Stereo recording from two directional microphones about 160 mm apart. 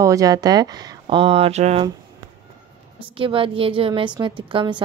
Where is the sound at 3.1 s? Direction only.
35° right (ahead or behind).